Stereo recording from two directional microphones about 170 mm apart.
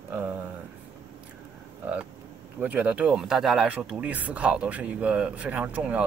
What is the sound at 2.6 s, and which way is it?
Speech, 10° right (ahead or behind).